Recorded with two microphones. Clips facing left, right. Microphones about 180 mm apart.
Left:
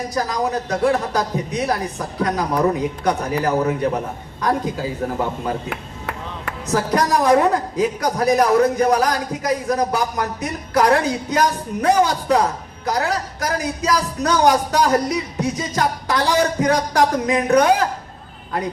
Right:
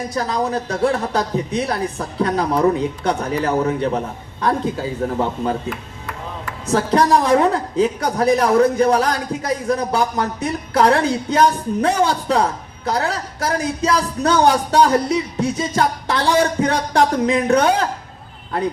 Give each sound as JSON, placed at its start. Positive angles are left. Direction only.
{"t": 0.1, "sound": "a woman's voice", "side_deg": -30}
{"t": 5.6, "sound": "chop", "side_deg": 65}
{"t": 6.7, "sound": "a woman's voice", "side_deg": -30}